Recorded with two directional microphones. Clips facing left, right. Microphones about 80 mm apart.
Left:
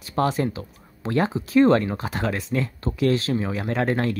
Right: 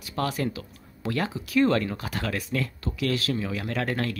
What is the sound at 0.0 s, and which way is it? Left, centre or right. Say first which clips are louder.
Speech: left 5 dB; left.